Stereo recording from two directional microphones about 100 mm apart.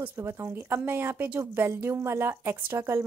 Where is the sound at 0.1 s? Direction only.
25° right (ahead or behind).